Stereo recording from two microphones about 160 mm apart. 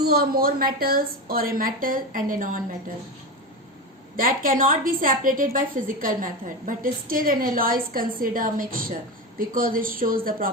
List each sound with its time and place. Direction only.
0.0 s a woman's voice: 75° right (ahead or behind); by 2.6 s 60° right (ahead or behind)
4.2 s a woman's voice: 60° right (ahead or behind)